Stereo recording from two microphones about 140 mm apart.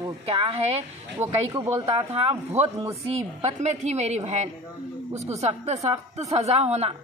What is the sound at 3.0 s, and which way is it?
Speech, 45° right (ahead or behind).